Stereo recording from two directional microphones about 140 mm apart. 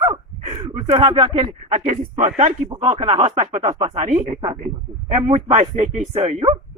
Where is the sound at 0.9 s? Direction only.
45° right (ahead or behind).